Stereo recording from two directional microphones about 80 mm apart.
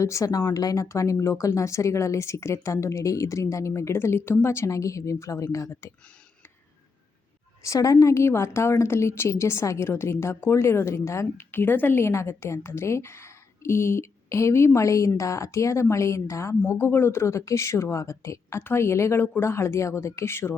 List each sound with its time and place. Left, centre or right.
0.0 s a woman's voice: left
7.6 s a woman's voice: left
16.7 s a woman's voice: left